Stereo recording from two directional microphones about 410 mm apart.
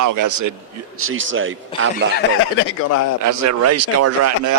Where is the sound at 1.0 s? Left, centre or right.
Right.